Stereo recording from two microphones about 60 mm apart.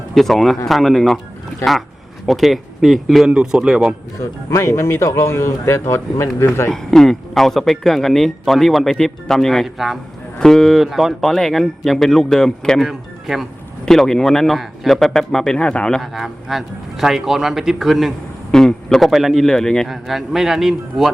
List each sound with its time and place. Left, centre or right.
0.1 s speech: centre
2.2 s speech: centre
4.2 s speech: left
6.7 s speech: centre
10.3 s speech: centre
12.9 s speech: centre
13.8 s a man's voice: centre
16.0 s a man's voice: centre
19.9 s speech: centre